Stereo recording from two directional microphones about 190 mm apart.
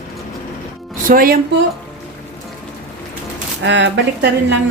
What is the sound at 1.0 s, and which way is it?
Speech, 50° right (ahead or behind).